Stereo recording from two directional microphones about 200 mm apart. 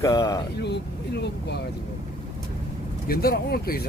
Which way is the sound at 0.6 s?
55° left (ahead or behind).